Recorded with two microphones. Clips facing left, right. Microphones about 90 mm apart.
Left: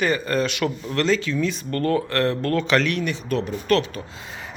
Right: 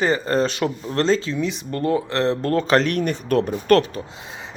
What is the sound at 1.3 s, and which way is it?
Speech, 20° right (ahead or behind).